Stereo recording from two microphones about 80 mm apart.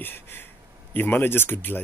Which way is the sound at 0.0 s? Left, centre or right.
Left.